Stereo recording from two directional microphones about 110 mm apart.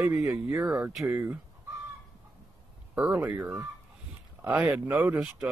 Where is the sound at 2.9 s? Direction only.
15° right (ahead or behind).